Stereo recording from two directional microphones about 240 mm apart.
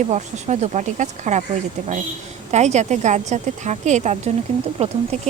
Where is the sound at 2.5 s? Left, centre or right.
Right.